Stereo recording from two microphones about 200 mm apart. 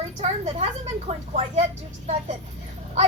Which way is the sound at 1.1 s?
35° right (ahead or behind).